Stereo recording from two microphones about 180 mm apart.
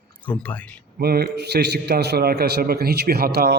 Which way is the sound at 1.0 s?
60° right (ahead or behind).